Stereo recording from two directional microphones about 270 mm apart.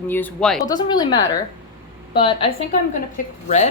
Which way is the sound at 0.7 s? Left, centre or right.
Centre.